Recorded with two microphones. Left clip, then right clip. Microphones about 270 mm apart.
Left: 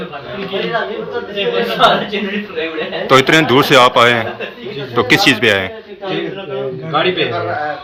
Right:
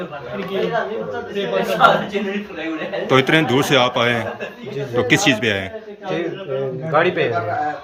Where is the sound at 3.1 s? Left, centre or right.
Centre.